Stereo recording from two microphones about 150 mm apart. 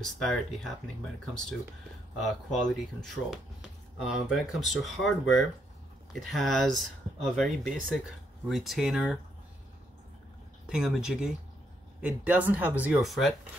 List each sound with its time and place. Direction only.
0.0 s speech: centre (ahead or behind)
10.7 s speech: 5° right (ahead or behind)